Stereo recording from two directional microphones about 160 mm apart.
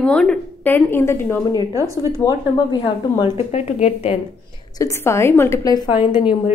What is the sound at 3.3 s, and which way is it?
Speech, 45° left (ahead or behind).